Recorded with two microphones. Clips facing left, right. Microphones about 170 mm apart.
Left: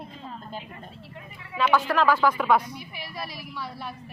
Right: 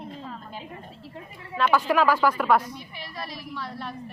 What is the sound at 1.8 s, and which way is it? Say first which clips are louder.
A woman's voice: right 1 dB; 10° right (ahead or behind).